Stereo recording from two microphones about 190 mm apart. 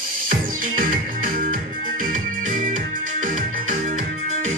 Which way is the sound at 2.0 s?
45° right (ahead or behind).